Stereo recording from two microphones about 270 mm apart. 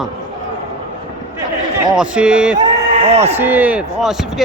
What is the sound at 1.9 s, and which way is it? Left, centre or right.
Speech, centre.